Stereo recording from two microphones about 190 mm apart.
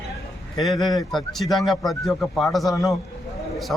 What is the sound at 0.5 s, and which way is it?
A man's voice, centre (ahead or behind).